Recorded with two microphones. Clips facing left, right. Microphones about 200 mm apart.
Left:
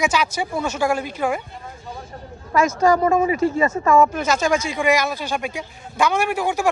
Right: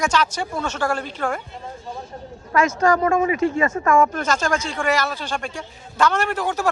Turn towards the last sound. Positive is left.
turn(degrees=10)  # may be behind; listen again after turning